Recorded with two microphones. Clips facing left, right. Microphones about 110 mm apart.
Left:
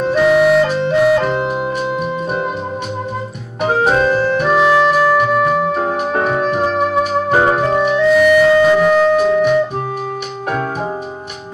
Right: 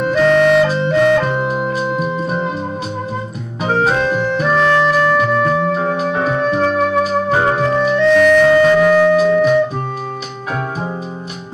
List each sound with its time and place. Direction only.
0.1 s music: 5° left (ahead or behind)
3.7 s music: 5° left (ahead or behind)
5.9 s music: 45° left (ahead or behind)
6.5 s music: 5° left (ahead or behind)